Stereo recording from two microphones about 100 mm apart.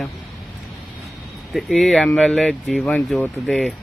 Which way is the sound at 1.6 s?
Centre (ahead or behind).